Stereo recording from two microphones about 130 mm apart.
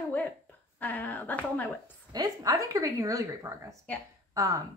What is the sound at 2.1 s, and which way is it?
A woman's voice, 30° right (ahead or behind).